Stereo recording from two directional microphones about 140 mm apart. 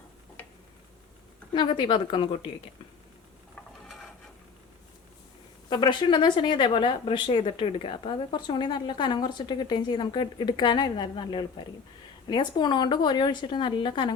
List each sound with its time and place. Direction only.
0.4 s tick-tock: 15° left (ahead or behind)
1.5 s speech: 35° left (ahead or behind)
3.5 s mechanisms: centre (ahead or behind)
5.6 s speech: 35° left (ahead or behind)